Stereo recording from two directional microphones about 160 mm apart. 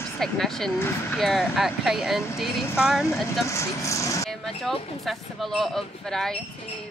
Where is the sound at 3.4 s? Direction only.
20° left (ahead or behind).